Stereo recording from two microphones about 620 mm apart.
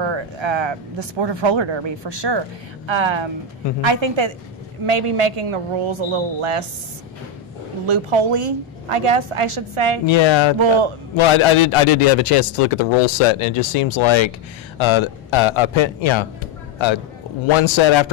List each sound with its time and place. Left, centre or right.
0.1 s speech: right
7.8 s speech: right
10.0 s a man's voice: left